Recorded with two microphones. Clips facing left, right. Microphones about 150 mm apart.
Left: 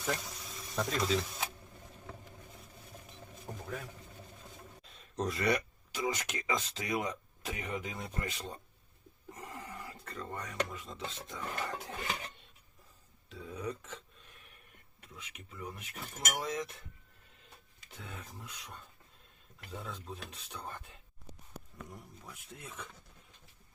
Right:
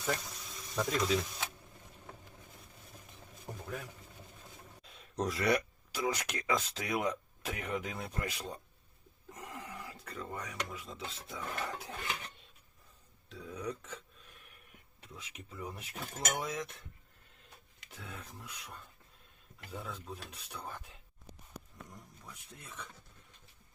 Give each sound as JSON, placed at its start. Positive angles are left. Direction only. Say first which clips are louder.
{"t": 0.0, "sound": "speech", "louder": "even", "side_deg": 0}
{"t": 3.6, "sound": "speech", "louder": "even", "side_deg": -10}
{"t": 13.3, "sound": "a sound", "louder": "even", "side_deg": 0}
{"t": 15.0, "sound": "speech", "louder": "right 2 dB", "side_deg": -35}
{"t": 16.4, "sound": "speech", "louder": "left 1 dB", "side_deg": 0}
{"t": 17.3, "sound": "a sound", "louder": "even", "side_deg": 0}
{"t": 19.7, "sound": "speech", "louder": "even", "side_deg": 0}